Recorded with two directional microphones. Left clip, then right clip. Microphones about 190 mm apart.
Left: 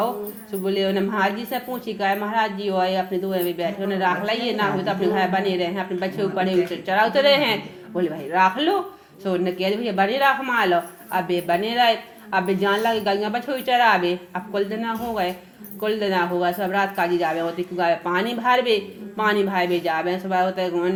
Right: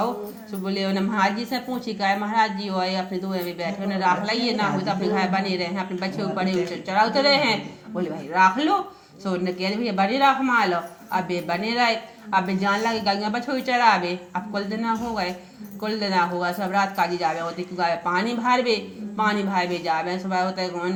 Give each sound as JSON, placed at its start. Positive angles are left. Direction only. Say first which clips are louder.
{"t": 0.6, "sound": "speech", "louder": "left 4 dB", "side_deg": 25}